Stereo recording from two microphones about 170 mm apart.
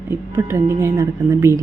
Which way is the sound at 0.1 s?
15° right (ahead or behind).